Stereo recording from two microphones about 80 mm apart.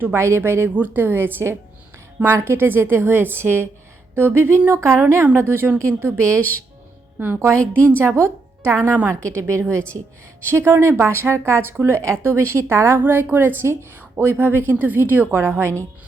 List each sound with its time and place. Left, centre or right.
0.0 s a woman's voice: right
13.0 s a woman's voice: right